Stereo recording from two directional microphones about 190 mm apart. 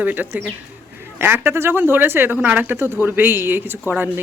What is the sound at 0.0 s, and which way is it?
Speech, 10° right (ahead or behind).